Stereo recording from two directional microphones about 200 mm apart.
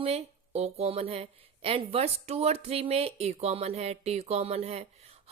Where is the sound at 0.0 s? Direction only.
30° right (ahead or behind).